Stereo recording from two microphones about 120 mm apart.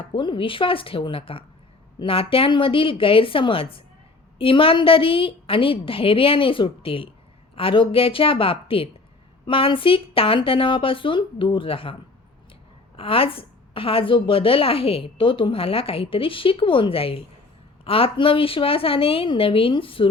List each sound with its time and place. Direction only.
0.1 s a woman's voice: 45° left (ahead or behind)
13.0 s a woman's voice: 50° left (ahead or behind)